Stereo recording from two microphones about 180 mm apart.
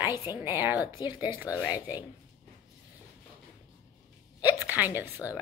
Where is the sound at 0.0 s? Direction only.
15° right (ahead or behind).